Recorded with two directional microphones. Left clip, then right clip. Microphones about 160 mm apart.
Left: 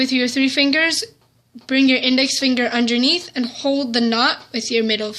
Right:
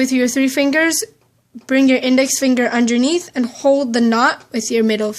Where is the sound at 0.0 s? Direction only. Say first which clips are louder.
Right 2 dB; 70° right (ahead or behind).